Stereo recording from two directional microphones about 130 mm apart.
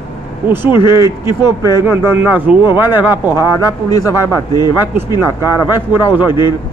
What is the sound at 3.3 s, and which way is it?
A man's voice, 30° left (ahead or behind).